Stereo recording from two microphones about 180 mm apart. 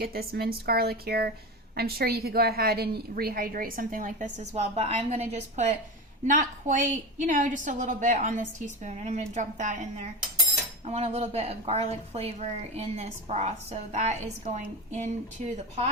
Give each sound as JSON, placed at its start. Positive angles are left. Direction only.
{"t": 0.0, "sound": "a woman's voice", "side_deg": -60}